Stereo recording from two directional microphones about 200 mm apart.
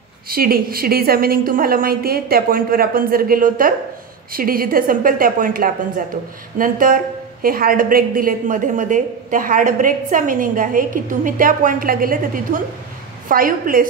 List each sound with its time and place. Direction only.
0.3 s a woman's voice: 50° right (ahead or behind)
13.3 s a woman's voice: 45° right (ahead or behind)